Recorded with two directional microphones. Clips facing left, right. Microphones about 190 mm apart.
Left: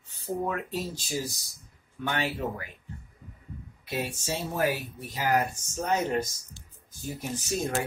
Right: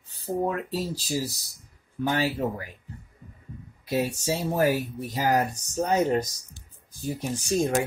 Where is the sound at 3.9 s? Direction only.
40° right (ahead or behind).